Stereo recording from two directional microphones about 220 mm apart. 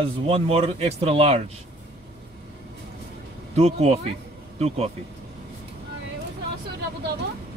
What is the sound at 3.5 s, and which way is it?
Speech, 30° right (ahead or behind).